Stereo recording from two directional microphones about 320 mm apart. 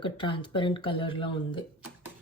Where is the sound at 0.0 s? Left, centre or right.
Centre.